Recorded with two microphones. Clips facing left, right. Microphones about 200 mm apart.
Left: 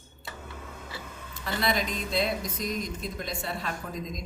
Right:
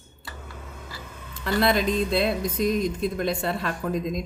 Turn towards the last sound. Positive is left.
turn(degrees=-60)  # may be behind; listen again after turning